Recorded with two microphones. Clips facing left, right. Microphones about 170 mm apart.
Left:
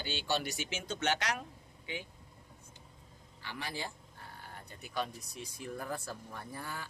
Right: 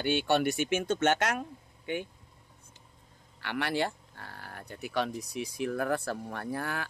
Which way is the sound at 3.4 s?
70° right (ahead or behind).